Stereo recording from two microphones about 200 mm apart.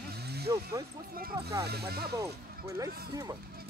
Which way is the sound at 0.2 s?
55° right (ahead or behind).